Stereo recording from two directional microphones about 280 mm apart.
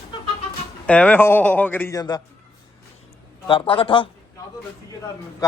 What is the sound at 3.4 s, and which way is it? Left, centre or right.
Speech, centre.